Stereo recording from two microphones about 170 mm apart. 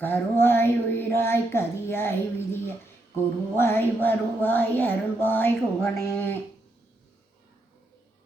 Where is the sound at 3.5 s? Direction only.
15° left (ahead or behind).